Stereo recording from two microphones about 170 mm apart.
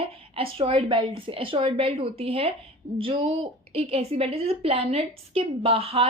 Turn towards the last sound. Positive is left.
turn(degrees=-35)  # may be behind; listen again after turning